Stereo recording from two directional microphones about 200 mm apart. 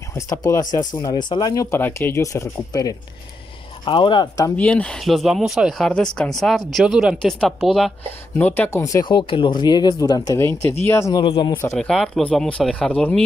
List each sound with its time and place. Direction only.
0.1 s speech: 15° left (ahead or behind)
4.6 s speech: 5° left (ahead or behind)
11.2 s speech: 30° left (ahead or behind)
11.5 s speech: 10° left (ahead or behind)